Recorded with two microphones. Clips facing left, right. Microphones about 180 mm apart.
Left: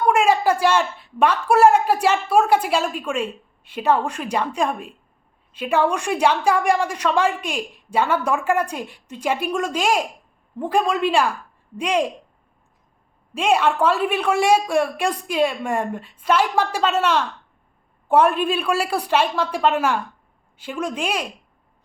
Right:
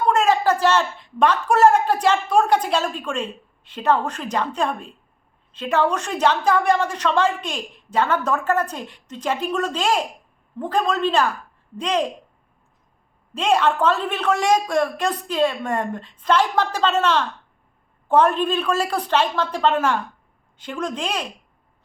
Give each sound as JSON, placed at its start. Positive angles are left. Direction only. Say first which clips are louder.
{"t": 0.1, "sound": "a woman's voice", "louder": "left 1 dB", "side_deg": 10}
{"t": 13.3, "sound": "a woman's voice", "louder": "even", "side_deg": 10}